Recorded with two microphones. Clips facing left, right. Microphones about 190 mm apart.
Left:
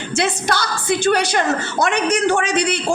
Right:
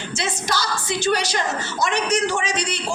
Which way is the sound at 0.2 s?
60° left (ahead or behind).